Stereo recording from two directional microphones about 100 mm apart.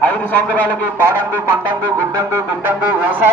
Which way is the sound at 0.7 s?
20° right (ahead or behind).